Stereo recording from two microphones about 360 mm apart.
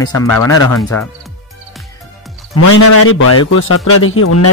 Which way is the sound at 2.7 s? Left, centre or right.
Left.